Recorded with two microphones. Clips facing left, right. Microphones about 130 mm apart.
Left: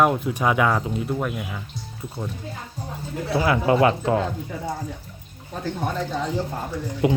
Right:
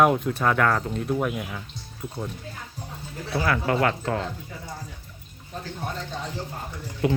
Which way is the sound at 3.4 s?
20° left (ahead or behind).